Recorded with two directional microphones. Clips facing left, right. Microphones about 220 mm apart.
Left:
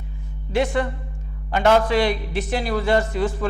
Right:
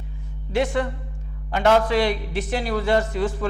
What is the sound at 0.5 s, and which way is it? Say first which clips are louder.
A man's voice: left 1 dB; 10° left (ahead or behind).